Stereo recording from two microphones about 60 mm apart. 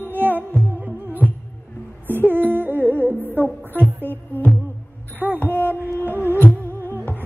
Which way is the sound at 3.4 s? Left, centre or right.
Right.